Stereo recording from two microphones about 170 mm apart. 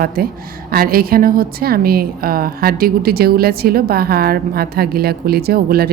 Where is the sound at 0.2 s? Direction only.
60° right (ahead or behind).